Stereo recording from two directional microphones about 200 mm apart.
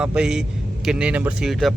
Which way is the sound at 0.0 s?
5° right (ahead or behind).